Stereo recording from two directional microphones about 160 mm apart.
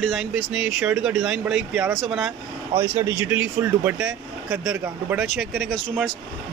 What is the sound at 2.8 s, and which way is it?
Speech, 15° right (ahead or behind).